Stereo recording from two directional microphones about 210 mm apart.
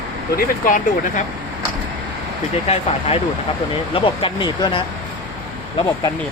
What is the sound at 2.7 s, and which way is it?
Speech, 30° left (ahead or behind).